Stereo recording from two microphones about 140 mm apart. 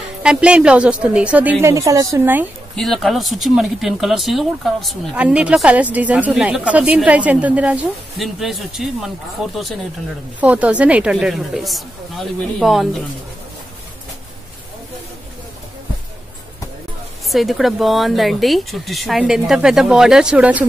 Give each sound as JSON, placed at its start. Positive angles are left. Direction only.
{"t": 0.2, "sound": "a woman's voice", "side_deg": -5}
{"t": 1.7, "sound": "a woman's voice", "side_deg": -25}
{"t": 2.7, "sound": "speech", "side_deg": 0}
{"t": 17.3, "sound": "speech", "side_deg": 0}